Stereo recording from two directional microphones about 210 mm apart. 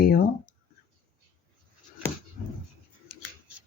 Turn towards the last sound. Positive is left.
turn(degrees=45)  # may be behind; listen again after turning